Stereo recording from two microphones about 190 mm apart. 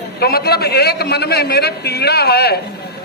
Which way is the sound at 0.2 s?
55° left (ahead or behind).